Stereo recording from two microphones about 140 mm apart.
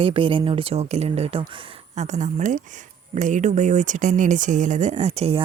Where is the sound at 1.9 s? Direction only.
55° right (ahead or behind).